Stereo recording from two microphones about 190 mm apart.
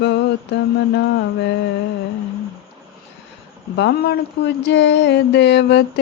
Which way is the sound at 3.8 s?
60° left (ahead or behind).